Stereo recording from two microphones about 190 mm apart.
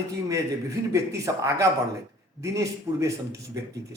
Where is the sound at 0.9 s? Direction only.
15° right (ahead or behind).